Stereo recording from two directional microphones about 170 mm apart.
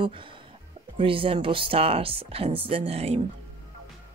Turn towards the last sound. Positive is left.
turn(degrees=-35)  # may be behind; listen again after turning